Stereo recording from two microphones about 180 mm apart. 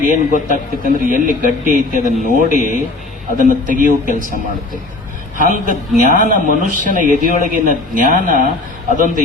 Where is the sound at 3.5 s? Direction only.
50° right (ahead or behind).